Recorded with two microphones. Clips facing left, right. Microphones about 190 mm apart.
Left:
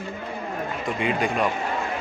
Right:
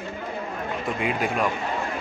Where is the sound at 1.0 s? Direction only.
5° right (ahead or behind).